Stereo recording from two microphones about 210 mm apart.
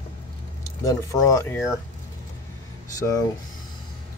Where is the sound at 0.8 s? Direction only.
15° left (ahead or behind).